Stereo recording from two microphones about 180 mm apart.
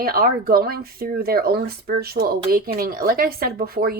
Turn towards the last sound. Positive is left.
turn(degrees=-55)  # may be behind; listen again after turning